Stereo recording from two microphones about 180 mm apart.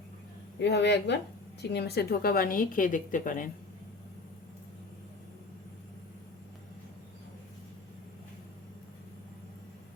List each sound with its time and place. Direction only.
0.6 s a woman's voice: 70° left (ahead or behind); by 3.5 s 50° left (ahead or behind)